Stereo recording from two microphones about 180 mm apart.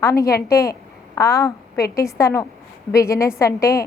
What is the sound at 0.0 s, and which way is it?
A woman's voice, 15° left (ahead or behind).